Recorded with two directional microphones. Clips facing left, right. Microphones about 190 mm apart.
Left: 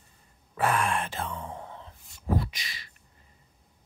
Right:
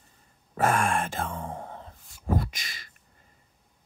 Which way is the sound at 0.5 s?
45° right (ahead or behind).